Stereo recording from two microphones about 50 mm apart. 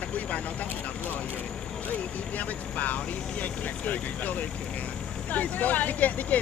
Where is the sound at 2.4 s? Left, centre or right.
Left.